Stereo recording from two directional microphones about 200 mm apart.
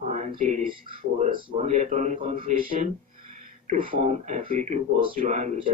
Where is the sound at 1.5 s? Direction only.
35° right (ahead or behind).